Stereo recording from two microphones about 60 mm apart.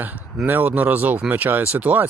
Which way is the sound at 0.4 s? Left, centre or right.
Right.